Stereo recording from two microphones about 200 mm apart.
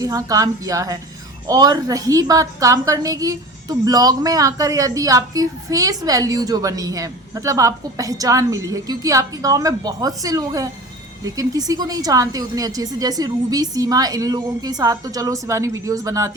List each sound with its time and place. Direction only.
0.0 s a woman's voice: 15° right (ahead or behind)